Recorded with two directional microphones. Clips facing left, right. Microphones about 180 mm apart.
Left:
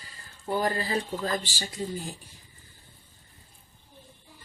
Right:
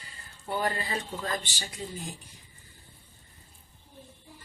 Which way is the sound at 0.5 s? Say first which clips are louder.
Left 3 dB; 35° left (ahead or behind).